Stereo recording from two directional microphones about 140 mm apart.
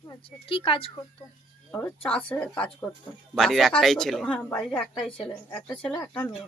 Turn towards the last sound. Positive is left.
turn(degrees=10)  # may be behind; listen again after turning